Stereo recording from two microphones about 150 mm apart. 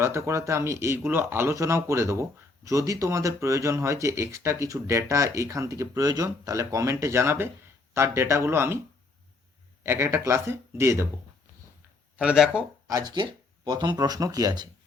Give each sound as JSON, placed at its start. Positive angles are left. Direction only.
{"t": 0.0, "sound": "speech", "side_deg": -20}
{"t": 9.8, "sound": "speech", "side_deg": -20}
{"t": 12.1, "sound": "speech", "side_deg": -5}
{"t": 12.9, "sound": "speech", "side_deg": -25}